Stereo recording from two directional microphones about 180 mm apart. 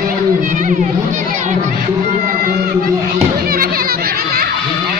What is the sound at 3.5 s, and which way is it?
Crowd, 55° right (ahead or behind).